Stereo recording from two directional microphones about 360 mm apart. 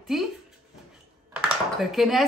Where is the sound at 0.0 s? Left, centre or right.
Centre.